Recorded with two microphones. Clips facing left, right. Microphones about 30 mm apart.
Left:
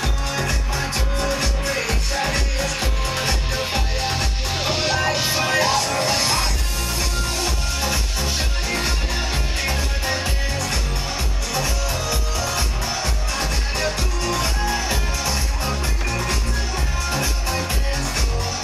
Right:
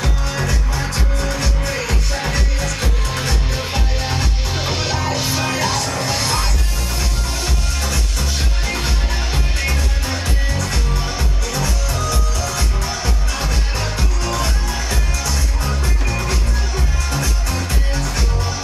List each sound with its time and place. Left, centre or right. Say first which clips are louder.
0.7 s music: right 1 dB; centre
1.7 s music: right 1 dB; centre
4.9 s music: even; left
7.0 s music: left 1 dB; centre
9.7 s music: even; centre
12.4 s music: right 1 dB; left
14.2 s music: right 1 dB; centre
16.2 s music: right 1 dB; centre
17.2 s music: even; centre